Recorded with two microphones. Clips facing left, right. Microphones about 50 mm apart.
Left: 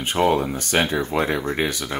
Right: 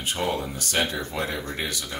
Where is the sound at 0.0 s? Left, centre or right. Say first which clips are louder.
Left 8 dB; left.